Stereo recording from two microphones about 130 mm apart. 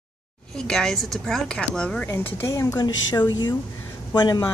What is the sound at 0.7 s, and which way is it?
Speech, 5° left (ahead or behind).